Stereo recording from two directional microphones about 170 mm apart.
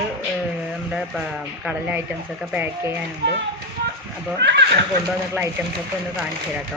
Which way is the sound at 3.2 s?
90° right.